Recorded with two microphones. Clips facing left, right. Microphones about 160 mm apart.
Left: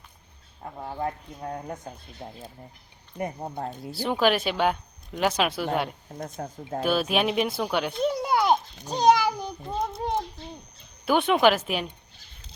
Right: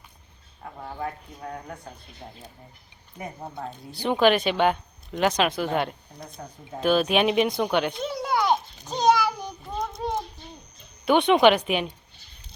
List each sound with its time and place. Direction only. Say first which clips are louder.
0.6 s speech: left 2 dB; 25° left (ahead or behind)
2.2 s speech: left 3 dB; 10° left (ahead or behind)
3.2 s speech: left 4 dB; 40° left (ahead or behind)
3.9 s speech: right 3 dB; 5° left (ahead or behind)
6.1 s speech: left 10 dB; 45° left (ahead or behind)
6.8 s speech: right 4 dB; 5° left (ahead or behind)
8.2 s babbling: right 2 dB; 10° left (ahead or behind)
11.0 s speech: right 3 dB; 5° left (ahead or behind)